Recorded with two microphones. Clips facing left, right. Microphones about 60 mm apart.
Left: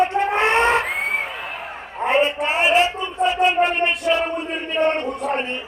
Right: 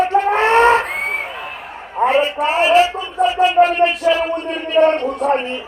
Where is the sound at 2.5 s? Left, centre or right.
Centre.